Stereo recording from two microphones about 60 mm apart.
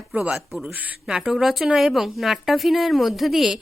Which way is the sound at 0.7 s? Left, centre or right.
Right.